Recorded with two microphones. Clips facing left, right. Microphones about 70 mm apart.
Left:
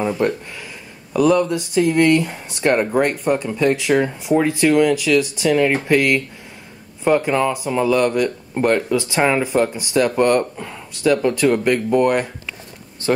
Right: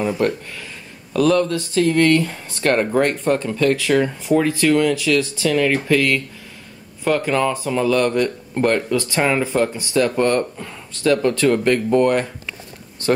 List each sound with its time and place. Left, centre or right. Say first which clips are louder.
0.0 s a sound: even; centre
1.1 s speech: left 1 dB; centre
8.6 s speech: left 1 dB; centre